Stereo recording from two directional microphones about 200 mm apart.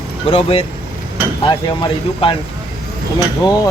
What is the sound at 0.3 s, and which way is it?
Speech, 30° left (ahead or behind).